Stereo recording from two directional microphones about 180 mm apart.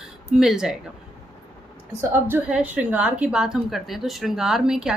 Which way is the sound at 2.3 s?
5° right (ahead or behind).